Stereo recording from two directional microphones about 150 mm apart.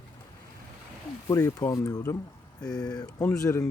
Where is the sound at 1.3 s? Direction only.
20° left (ahead or behind).